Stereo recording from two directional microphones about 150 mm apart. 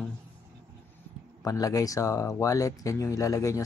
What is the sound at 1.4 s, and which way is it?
Speech, 25° left (ahead or behind).